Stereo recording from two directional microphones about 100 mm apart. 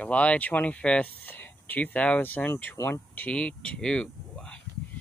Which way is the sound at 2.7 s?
30° left (ahead or behind).